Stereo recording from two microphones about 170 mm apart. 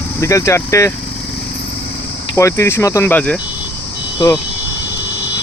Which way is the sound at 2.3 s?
20° left (ahead or behind).